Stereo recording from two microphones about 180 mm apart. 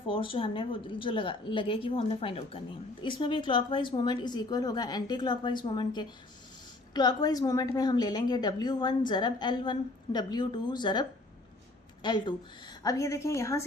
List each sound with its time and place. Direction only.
0.1 s a woman's voice: 30° left (ahead or behind)
12.0 s a woman's voice: 25° left (ahead or behind)